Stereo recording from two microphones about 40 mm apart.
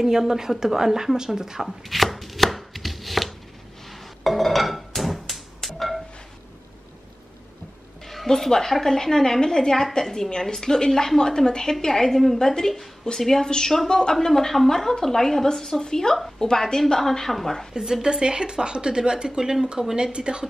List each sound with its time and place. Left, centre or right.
0.0 s a woman's voice: centre
1.7 s chopping: centre
3.9 s a sound: centre
8.1 s a woman's voice: centre
18.0 s speech: centre